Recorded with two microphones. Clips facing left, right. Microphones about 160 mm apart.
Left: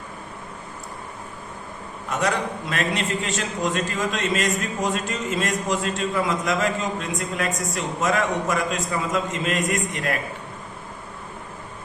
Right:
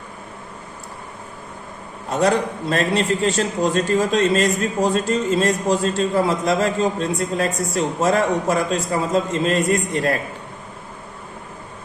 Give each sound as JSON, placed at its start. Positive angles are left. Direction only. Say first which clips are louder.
{"t": 2.0, "sound": "a man's voice", "louder": "right 6 dB", "side_deg": -30}